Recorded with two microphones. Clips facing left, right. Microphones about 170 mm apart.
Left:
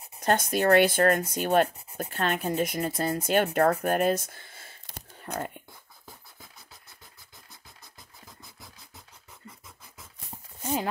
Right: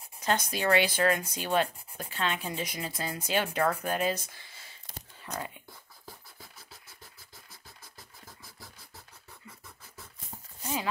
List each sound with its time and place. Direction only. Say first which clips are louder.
0.2 s speech: left 5 dB; 50° left (ahead or behind)
4.9 s whispering: left 4 dB; 55° left (ahead or behind)